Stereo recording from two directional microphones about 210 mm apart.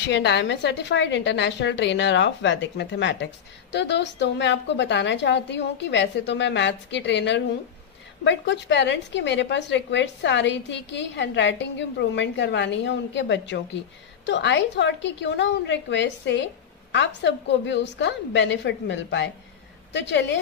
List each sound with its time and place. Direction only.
0.0 s a woman's voice: 55° left (ahead or behind)